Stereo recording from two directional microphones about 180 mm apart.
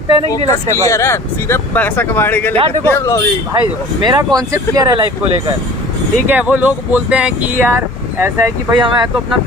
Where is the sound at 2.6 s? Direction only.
30° right (ahead or behind).